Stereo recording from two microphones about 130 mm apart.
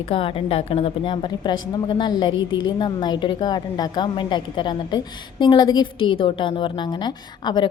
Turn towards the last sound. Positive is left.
turn(degrees=35)  # may be behind; listen again after turning